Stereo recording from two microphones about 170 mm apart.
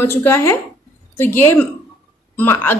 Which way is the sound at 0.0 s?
15° left (ahead or behind).